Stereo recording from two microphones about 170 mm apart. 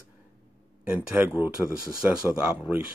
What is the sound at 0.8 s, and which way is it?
Speech, 10° right (ahead or behind).